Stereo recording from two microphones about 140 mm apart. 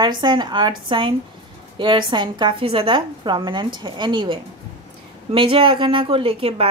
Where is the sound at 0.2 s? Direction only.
35° right (ahead or behind).